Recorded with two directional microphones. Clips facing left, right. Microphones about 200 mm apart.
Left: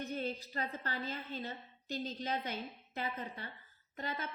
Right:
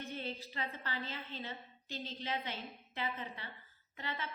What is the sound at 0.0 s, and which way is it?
A woman's voice, 40° left (ahead or behind).